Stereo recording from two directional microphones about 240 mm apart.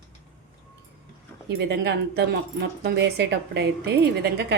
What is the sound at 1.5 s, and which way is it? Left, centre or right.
A woman's voice, right.